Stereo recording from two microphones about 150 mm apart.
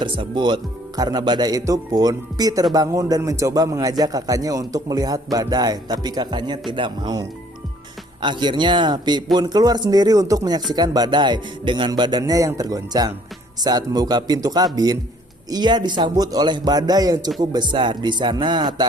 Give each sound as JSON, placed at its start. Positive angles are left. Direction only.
{"t": 0.0, "sound": "a man's voice", "side_deg": -30}